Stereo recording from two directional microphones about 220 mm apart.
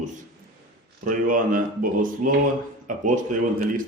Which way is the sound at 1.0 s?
40° right (ahead or behind).